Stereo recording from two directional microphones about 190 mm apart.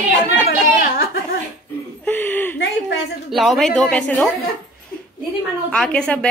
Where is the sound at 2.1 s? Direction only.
10° left (ahead or behind).